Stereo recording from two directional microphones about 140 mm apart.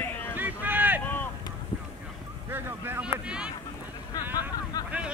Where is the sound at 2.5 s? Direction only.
15° right (ahead or behind).